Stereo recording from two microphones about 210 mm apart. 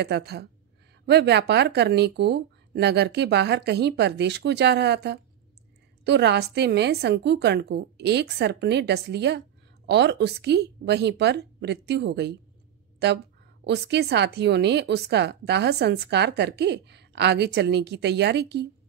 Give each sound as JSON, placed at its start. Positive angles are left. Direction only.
{"t": 0.0, "sound": "a woman's voice", "side_deg": -50}
{"t": 13.7, "sound": "a woman's voice", "side_deg": -50}